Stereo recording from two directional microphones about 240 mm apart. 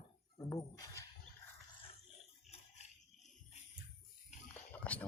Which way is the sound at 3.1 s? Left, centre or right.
Left.